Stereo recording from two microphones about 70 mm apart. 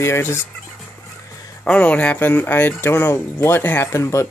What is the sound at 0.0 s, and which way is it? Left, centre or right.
Speech, left.